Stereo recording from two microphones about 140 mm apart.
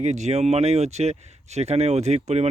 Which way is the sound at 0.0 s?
55° right (ahead or behind).